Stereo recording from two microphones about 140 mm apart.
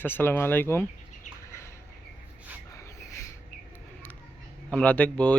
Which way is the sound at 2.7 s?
20° left (ahead or behind).